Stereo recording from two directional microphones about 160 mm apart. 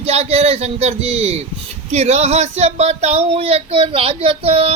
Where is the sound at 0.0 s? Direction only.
40° right (ahead or behind).